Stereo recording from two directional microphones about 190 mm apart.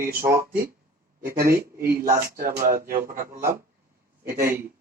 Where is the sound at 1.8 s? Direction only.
50° right (ahead or behind).